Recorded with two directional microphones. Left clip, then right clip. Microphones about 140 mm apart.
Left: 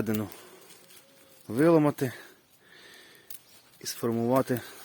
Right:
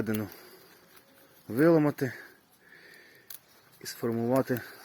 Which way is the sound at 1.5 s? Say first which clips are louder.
Left 1 dB; 25° left (ahead or behind).